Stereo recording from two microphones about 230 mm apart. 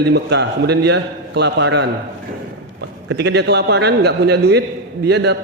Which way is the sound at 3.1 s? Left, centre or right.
Right.